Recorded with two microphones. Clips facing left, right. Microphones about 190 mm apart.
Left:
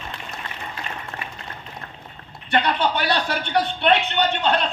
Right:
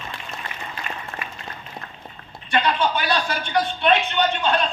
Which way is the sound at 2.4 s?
60° left (ahead or behind).